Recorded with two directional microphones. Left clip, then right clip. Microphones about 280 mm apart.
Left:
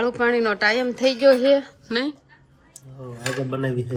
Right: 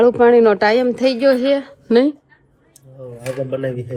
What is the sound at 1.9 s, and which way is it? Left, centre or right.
Speech, centre.